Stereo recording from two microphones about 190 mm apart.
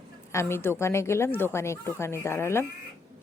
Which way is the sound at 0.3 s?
15° left (ahead or behind).